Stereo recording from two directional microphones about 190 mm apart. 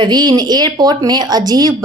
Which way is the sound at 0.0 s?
20° right (ahead or behind).